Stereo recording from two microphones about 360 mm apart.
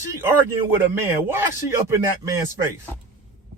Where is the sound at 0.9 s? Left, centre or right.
Centre.